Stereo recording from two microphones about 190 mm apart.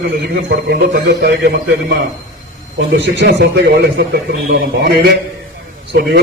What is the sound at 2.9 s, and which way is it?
Speech, 60° right (ahead or behind).